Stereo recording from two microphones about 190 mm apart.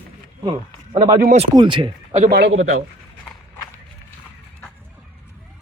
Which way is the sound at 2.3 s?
60° right (ahead or behind).